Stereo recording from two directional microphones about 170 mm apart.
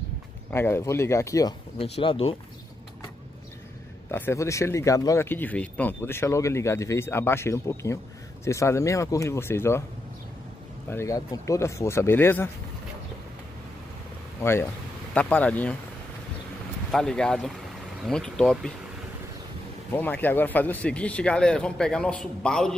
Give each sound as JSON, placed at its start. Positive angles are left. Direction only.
{"t": 0.5, "sound": "speech", "side_deg": 15}
{"t": 1.8, "sound": "speech", "side_deg": 35}
{"t": 4.1, "sound": "speech", "side_deg": 15}
{"t": 10.9, "sound": "speech", "side_deg": 15}
{"t": 15.1, "sound": "speech", "side_deg": 10}
{"t": 16.9, "sound": "speech", "side_deg": 5}
{"t": 19.9, "sound": "speech", "side_deg": 10}